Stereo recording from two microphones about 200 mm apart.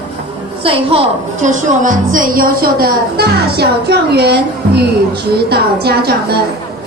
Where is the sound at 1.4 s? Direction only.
40° right (ahead or behind).